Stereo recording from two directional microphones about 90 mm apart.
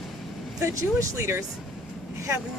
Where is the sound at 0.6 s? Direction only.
35° right (ahead or behind).